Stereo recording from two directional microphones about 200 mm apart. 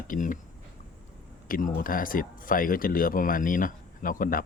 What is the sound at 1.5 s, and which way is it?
Speech, 45° left (ahead or behind).